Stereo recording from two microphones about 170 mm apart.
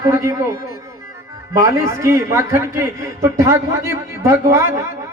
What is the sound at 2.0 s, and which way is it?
A man's voice, 15° right (ahead or behind).